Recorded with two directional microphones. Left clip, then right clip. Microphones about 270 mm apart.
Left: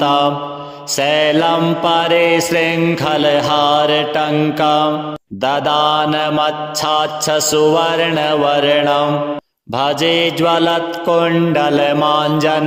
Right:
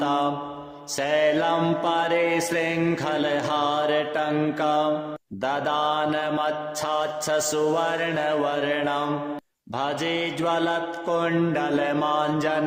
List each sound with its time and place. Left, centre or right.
0.0 s mantra: left